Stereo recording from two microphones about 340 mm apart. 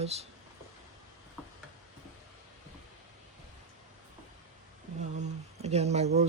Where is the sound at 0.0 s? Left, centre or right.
Centre.